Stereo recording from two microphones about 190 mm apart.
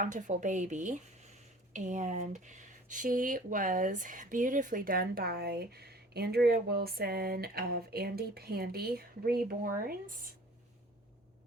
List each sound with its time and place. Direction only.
0.0 s speech: 40° right (ahead or behind)